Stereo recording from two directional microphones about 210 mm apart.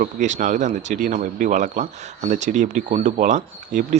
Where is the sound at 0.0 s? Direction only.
35° right (ahead or behind).